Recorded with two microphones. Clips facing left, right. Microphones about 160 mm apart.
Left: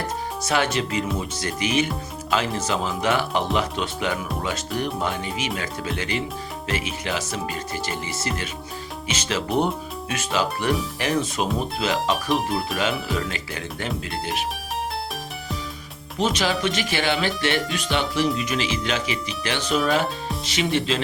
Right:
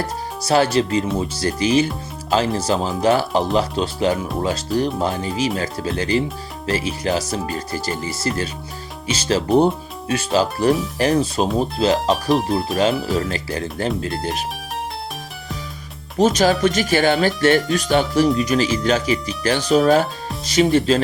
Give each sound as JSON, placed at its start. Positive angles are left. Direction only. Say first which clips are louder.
{"t": 0.4, "sound": "speech", "louder": "right 7 dB", "side_deg": -35}
{"t": 16.1, "sound": "speech", "louder": "right 7 dB", "side_deg": -40}